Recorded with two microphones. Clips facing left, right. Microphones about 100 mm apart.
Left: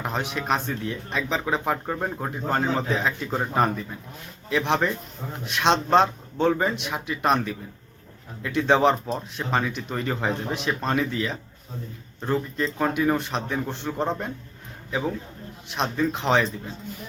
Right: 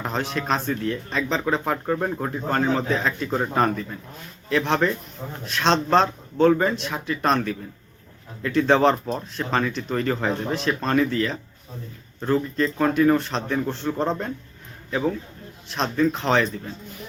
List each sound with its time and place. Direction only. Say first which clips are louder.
0.0 s speech: right 2 dB; 15° left (ahead or behind)
15.7 s speech: right 3 dB; 15° left (ahead or behind)